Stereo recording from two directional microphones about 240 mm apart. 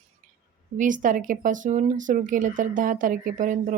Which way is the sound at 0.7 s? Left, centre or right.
Right.